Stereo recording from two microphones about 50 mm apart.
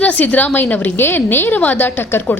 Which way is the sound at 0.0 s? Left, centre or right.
Left.